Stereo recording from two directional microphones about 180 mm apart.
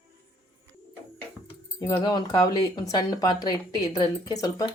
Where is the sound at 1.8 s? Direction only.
20° left (ahead or behind).